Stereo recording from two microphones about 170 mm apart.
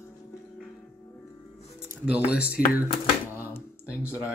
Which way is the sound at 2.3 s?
70° left (ahead or behind).